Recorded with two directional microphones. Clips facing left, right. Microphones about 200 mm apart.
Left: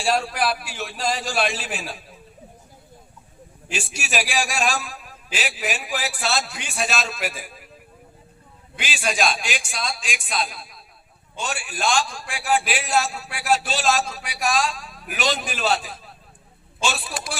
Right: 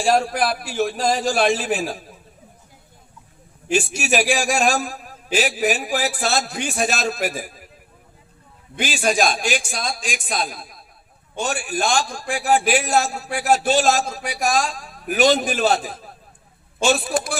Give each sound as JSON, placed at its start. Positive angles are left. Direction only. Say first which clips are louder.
{"t": 0.0, "sound": "a man's voice", "louder": "right 4 dB", "side_deg": -45}
{"t": 3.7, "sound": "a man's voice", "louder": "right 9 dB", "side_deg": -45}
{"t": 8.7, "sound": "a man's voice", "louder": "right 6 dB", "side_deg": -45}